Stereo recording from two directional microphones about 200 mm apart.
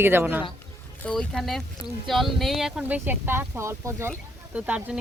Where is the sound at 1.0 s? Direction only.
Centre (ahead or behind).